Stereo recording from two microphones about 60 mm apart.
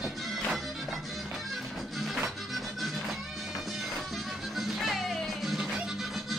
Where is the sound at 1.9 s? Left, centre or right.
Centre.